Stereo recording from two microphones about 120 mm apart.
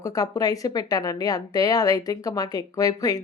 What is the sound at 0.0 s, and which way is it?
Speech, 30° left (ahead or behind).